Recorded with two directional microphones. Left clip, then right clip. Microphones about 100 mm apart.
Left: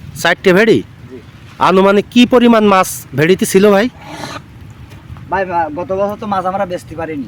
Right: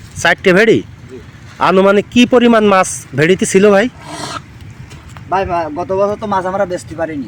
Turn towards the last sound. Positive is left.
turn(degrees=-25)  # may be behind; listen again after turning